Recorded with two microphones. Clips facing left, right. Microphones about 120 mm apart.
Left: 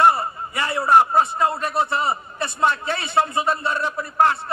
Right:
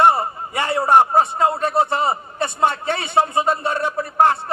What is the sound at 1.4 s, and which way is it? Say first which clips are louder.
A man's voice: right 3 dB; 25° right (ahead or behind).